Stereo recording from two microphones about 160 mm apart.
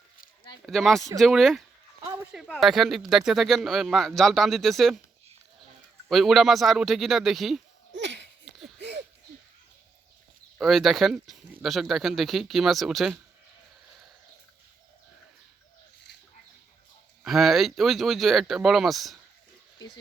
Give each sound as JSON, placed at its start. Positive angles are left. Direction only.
{"t": 0.6, "sound": "speech", "side_deg": 0}
{"t": 6.1, "sound": "speech", "side_deg": 0}
{"t": 7.9, "sound": "a sound", "side_deg": -90}
{"t": 10.6, "sound": "speech", "side_deg": 0}
{"t": 17.2, "sound": "speech", "side_deg": 0}